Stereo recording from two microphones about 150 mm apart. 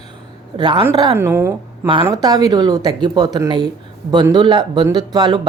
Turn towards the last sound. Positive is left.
turn(degrees=-30)  # may be behind; listen again after turning